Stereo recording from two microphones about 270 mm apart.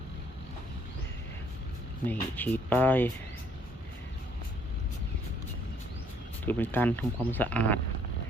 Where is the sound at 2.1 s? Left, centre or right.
Centre.